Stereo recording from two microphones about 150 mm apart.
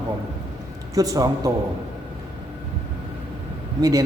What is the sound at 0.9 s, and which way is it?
Speech, 25° right (ahead or behind).